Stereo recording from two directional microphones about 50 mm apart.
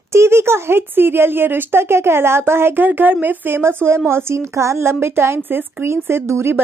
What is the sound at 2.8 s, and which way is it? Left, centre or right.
Speech, right.